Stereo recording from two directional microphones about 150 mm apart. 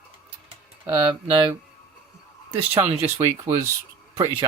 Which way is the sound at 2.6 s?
15° right (ahead or behind).